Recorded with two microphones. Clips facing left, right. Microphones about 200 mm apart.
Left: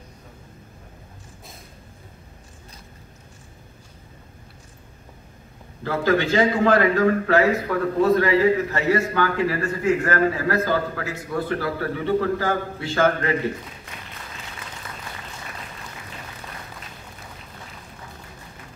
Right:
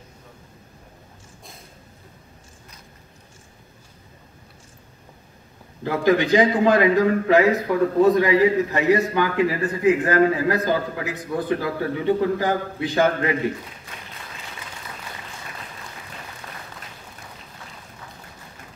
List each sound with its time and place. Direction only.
5.9 s a man's voice: 15° right (ahead or behind)